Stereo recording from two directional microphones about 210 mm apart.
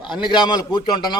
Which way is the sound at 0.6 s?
20° left (ahead or behind).